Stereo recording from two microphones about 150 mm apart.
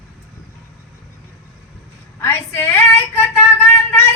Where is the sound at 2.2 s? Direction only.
20° left (ahead or behind).